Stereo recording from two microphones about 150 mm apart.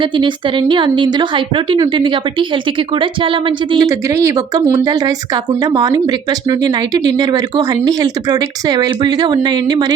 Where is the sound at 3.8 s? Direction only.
20° right (ahead or behind).